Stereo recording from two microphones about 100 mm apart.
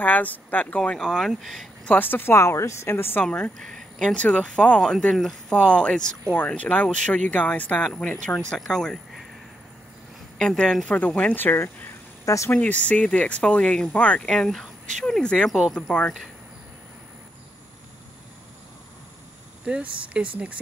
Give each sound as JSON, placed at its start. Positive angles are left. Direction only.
{"t": 0.0, "sound": "speech", "side_deg": 15}
{"t": 1.9, "sound": "a woman's voice", "side_deg": 20}
{"t": 3.5, "sound": "speech", "side_deg": 5}
{"t": 10.4, "sound": "speech", "side_deg": 5}
{"t": 12.5, "sound": "speech", "side_deg": 15}
{"t": 19.6, "sound": "speech", "side_deg": -10}